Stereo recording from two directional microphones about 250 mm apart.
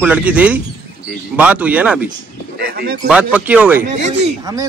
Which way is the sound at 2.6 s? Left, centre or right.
Right.